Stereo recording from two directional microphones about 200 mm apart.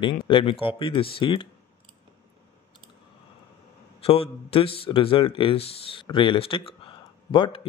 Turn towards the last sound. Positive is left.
turn(degrees=25)  # may be behind; listen again after turning